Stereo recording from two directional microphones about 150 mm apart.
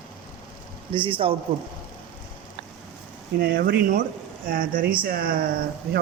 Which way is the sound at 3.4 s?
80° right.